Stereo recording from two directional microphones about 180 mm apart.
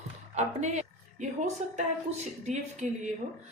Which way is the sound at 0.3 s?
40° right (ahead or behind).